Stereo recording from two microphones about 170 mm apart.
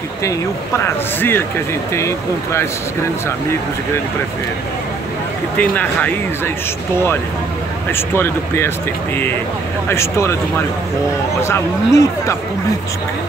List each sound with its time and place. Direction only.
0.8 s speech: 15° left (ahead or behind)
5.6 s speech: 10° left (ahead or behind)
7.9 s speech: 15° left (ahead or behind)
9.8 s speech: 15° left (ahead or behind)
11.4 s speech: 15° left (ahead or behind)